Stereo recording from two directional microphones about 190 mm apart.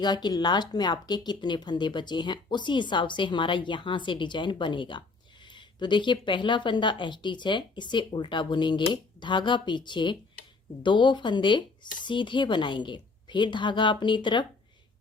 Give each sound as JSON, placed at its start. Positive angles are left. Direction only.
{"t": 0.0, "sound": "speech", "side_deg": 20}